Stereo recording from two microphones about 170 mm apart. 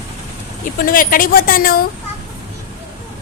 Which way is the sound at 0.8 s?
55° left (ahead or behind).